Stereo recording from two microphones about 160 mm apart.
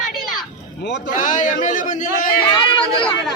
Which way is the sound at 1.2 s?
55° left (ahead or behind).